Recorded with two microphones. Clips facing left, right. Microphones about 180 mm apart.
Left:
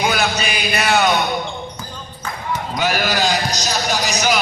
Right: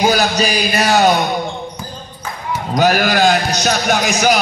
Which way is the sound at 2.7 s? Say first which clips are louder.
Right 7 dB; 45° right (ahead or behind).